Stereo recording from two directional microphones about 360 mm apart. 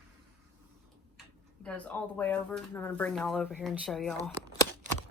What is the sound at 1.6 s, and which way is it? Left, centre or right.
Speech, centre.